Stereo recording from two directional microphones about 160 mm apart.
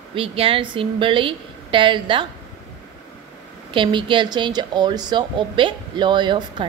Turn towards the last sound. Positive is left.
turn(degrees=-30)  # may be behind; listen again after turning